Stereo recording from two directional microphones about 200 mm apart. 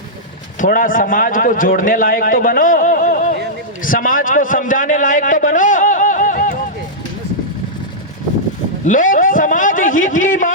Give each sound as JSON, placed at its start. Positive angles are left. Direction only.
{"t": 0.6, "sound": "a man's voice", "side_deg": 45}
{"t": 8.8, "sound": "a man's voice", "side_deg": 40}